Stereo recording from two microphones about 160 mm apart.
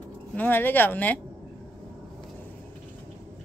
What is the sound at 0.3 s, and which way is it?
Speech, 10° left (ahead or behind).